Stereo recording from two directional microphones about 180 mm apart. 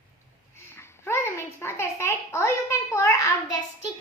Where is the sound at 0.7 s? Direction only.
15° left (ahead or behind).